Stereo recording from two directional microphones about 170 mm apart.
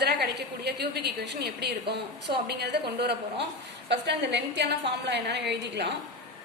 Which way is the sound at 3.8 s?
90° right.